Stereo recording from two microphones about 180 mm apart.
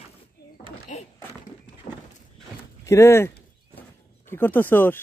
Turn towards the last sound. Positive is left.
turn(degrees=10)  # may be behind; listen again after turning